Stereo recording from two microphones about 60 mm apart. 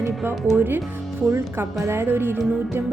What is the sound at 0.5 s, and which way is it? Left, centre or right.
A woman's voice, right.